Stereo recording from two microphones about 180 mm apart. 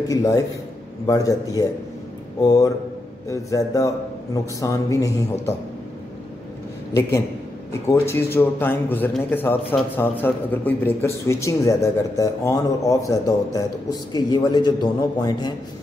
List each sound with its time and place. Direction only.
0.1 s a man's voice: 20° left (ahead or behind)
7.0 s a man's voice: 20° left (ahead or behind)